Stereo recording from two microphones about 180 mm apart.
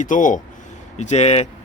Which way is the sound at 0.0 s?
45° left (ahead or behind).